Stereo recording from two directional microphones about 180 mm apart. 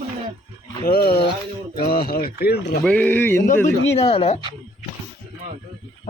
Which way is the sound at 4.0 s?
35° left (ahead or behind).